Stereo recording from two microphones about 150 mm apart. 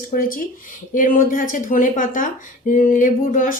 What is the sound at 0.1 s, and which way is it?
Speech, 70° left (ahead or behind).